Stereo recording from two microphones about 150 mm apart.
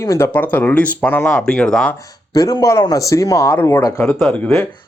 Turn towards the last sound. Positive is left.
turn(degrees=10)  # may be behind; listen again after turning